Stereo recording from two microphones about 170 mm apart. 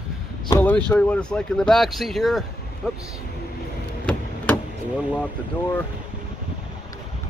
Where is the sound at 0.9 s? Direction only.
5° left (ahead or behind).